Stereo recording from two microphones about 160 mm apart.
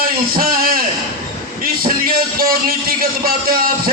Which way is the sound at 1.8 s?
65° right (ahead or behind).